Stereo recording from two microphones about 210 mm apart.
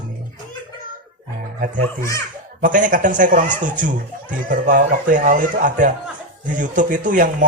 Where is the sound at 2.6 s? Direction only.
40° right (ahead or behind).